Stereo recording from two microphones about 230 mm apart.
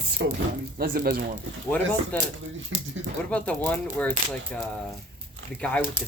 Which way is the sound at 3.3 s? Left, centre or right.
Centre.